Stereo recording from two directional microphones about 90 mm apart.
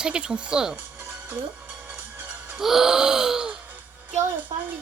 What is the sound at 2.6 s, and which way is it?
Speech, 5° right (ahead or behind).